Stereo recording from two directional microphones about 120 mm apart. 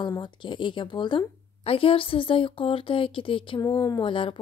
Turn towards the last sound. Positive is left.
turn(degrees=45)  # may be behind; listen again after turning